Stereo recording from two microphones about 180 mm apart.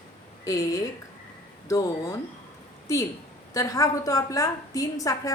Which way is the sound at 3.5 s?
20° left (ahead or behind).